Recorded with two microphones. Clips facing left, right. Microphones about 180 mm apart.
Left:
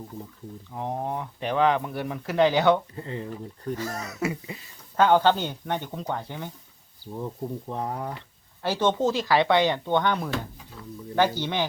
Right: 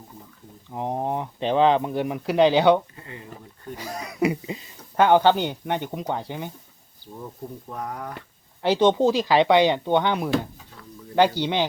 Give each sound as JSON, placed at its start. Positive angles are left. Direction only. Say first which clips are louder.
{"t": 0.7, "sound": "speech", "louder": "right 4 dB", "side_deg": -20}
{"t": 2.9, "sound": "speech", "louder": "left 7 dB", "side_deg": 30}
{"t": 3.8, "sound": "speech", "louder": "right 9 dB", "side_deg": -15}
{"t": 7.7, "sound": "speech", "louder": "even", "side_deg": 25}
{"t": 8.6, "sound": "speech", "louder": "right 5 dB", "side_deg": -15}